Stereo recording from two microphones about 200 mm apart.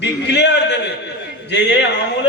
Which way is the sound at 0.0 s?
60° left (ahead or behind).